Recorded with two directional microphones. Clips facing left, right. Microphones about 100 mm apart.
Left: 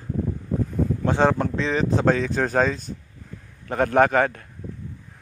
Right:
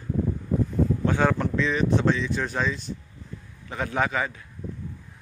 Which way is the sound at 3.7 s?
55° left (ahead or behind).